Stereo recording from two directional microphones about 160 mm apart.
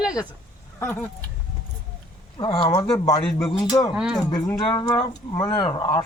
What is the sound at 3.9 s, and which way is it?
Speech, 5° right (ahead or behind).